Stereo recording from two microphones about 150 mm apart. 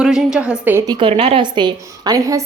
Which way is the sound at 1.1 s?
40° right (ahead or behind).